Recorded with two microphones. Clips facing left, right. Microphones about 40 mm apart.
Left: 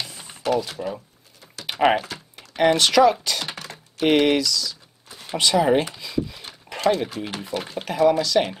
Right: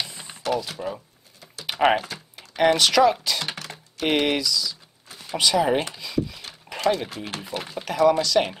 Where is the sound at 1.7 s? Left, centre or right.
Centre.